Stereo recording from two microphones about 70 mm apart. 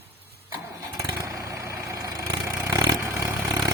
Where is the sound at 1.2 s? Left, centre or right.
Right.